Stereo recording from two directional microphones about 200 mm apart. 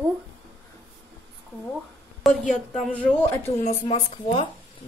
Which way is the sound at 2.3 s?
Centre (ahead or behind).